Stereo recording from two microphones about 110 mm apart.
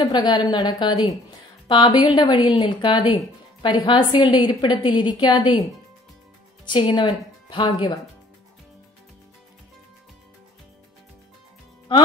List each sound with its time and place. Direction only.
0.0 s a woman's voice: 40° left (ahead or behind)
6.7 s a woman's voice: 45° left (ahead or behind)